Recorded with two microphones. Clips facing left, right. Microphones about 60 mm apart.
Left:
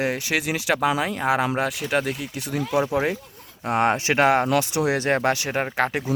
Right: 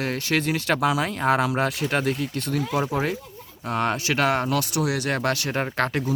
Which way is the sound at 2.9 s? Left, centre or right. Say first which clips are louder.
Left 2 dB; centre.